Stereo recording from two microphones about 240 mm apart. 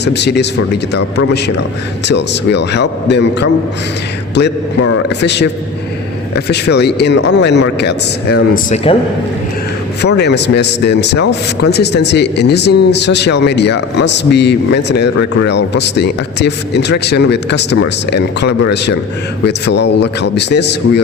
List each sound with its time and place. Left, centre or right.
0.0 s speech: left
8.7 s speech: left
10.0 s speech: left